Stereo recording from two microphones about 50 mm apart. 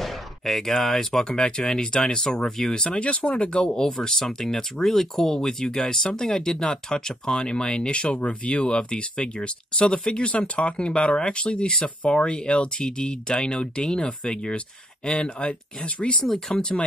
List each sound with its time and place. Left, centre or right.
0.0 s speech: centre; by 16.3 s left
16.3 s speech: centre